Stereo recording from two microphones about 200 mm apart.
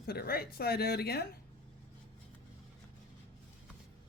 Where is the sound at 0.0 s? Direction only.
50° left (ahead or behind).